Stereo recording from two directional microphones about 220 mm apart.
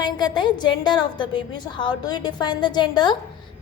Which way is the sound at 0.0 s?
20° left (ahead or behind).